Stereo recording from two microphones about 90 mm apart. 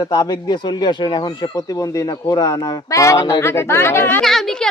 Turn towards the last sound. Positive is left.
turn(degrees=5)  # may be behind; listen again after turning